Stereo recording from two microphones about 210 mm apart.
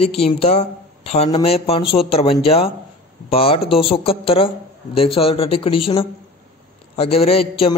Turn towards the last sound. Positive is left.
turn(degrees=25)  # may be behind; listen again after turning